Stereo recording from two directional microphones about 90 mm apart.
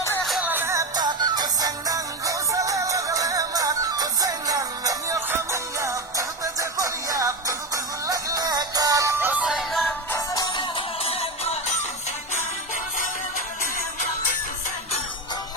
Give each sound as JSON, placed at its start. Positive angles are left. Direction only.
{"t": 0.4, "sound": "music", "side_deg": -20}
{"t": 0.9, "sound": "music", "side_deg": -50}
{"t": 9.1, "sound": "music", "side_deg": -20}
{"t": 9.5, "sound": "music", "side_deg": 0}
{"t": 10.2, "sound": "music", "side_deg": 40}
{"t": 10.5, "sound": "music", "side_deg": 70}